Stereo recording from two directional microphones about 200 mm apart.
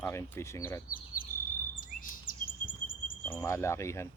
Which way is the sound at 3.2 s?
10° left (ahead or behind).